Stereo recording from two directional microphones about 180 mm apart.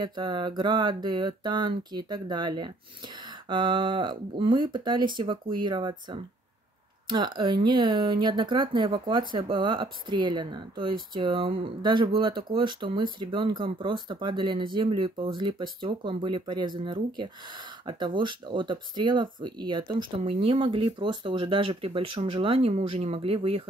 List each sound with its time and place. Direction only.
0.0 s speech: 25° right (ahead or behind)